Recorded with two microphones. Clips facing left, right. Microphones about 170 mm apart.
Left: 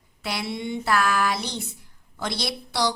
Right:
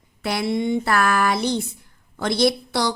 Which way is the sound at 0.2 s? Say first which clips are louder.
Right 7 dB; 55° right (ahead or behind).